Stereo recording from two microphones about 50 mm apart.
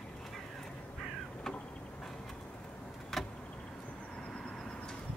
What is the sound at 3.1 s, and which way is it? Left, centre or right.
Vehicle, centre.